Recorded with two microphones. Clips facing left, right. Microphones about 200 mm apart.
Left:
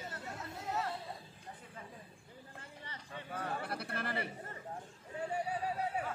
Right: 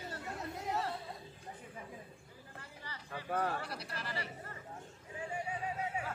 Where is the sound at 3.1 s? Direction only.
60° right (ahead or behind).